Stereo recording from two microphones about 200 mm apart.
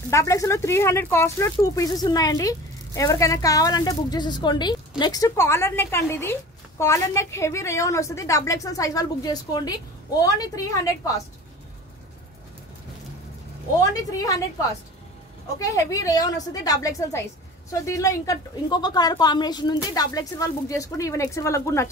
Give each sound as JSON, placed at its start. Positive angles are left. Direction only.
{"t": 0.1, "sound": "speech", "side_deg": 15}
{"t": 13.7, "sound": "speech", "side_deg": 15}
{"t": 15.6, "sound": "speech", "side_deg": 15}